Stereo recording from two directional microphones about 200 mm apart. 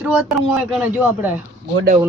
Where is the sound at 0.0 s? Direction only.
5° right (ahead or behind).